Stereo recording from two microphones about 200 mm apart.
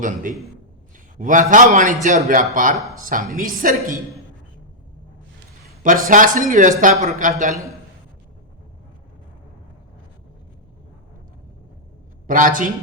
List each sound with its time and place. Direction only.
0.0 s a man's voice: 40° right (ahead or behind)
5.8 s speech: 40° right (ahead or behind)
12.3 s speech: 40° right (ahead or behind)